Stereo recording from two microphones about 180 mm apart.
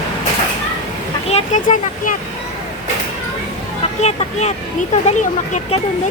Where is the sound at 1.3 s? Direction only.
40° left (ahead or behind).